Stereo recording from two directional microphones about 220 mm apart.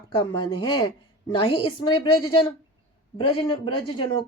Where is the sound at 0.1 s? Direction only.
20° left (ahead or behind).